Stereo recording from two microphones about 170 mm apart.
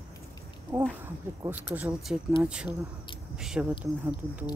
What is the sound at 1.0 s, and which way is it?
Speech, 15° right (ahead or behind).